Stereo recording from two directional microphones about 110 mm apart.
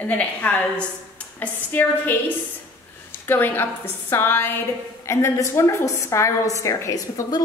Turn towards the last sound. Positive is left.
turn(degrees=30)  # may be behind; listen again after turning